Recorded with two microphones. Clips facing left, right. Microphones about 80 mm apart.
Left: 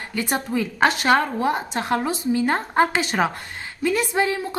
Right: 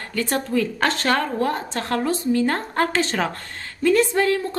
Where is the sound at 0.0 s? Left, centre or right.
Centre.